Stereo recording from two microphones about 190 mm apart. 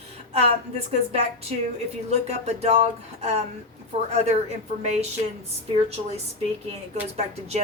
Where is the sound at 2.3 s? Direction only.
35° right (ahead or behind).